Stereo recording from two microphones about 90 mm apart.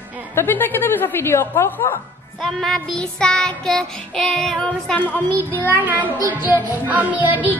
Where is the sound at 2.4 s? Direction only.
5° left (ahead or behind).